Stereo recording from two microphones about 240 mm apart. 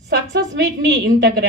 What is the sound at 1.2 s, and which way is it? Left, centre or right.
Speech, right.